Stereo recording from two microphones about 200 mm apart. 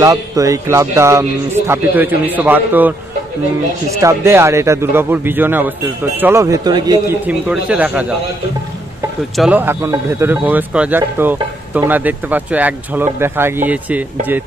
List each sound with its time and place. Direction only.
0.0 s a man's voice: 15° right (ahead or behind)
4.0 s a man's voice: 15° right (ahead or behind)
7.2 s a man's voice: 5° right (ahead or behind)
9.4 s a man's voice: 10° right (ahead or behind)